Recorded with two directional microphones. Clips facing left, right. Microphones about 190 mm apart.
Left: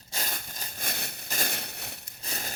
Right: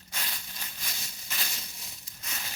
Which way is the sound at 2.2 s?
40° left (ahead or behind).